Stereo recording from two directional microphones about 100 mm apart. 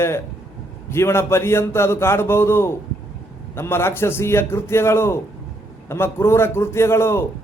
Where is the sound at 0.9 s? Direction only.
25° left (ahead or behind).